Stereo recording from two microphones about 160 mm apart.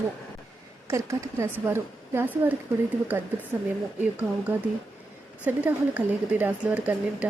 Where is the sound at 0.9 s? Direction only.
15° right (ahead or behind).